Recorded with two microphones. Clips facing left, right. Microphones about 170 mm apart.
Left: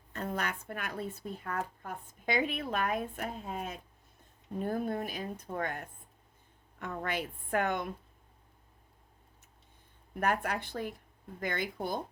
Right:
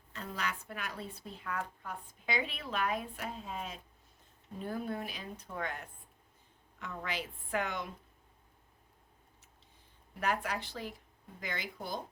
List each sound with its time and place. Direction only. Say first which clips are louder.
0.1 s speech: left 4 dB; 50° left (ahead or behind)
10.2 s speech: left 3 dB; 55° left (ahead or behind)